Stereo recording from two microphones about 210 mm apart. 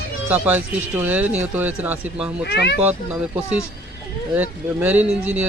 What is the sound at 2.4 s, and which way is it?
Speech, 55° left (ahead or behind).